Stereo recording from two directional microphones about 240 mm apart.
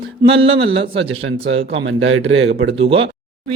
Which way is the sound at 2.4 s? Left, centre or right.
Right.